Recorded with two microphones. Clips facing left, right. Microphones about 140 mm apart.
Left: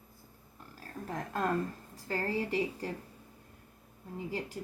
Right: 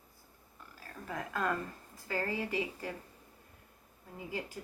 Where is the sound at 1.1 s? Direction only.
40° left (ahead or behind).